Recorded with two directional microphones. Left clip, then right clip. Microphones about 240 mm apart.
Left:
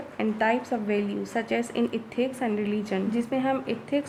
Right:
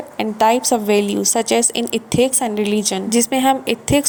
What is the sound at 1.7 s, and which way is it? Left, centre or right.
A woman's voice, right.